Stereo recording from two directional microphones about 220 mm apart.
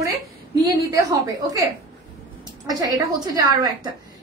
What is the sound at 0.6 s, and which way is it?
A woman's voice, 15° right (ahead or behind).